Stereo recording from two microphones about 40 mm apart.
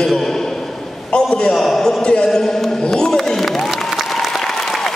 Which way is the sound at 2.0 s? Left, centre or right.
Left.